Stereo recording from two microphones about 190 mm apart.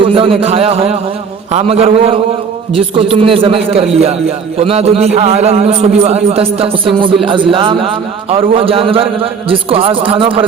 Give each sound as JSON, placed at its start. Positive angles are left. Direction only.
{"t": 0.0, "sound": "a man's voice", "side_deg": -30}